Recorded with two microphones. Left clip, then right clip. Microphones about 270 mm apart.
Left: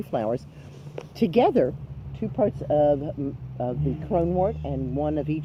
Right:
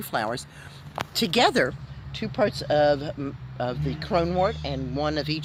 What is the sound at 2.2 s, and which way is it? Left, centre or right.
Speech, right.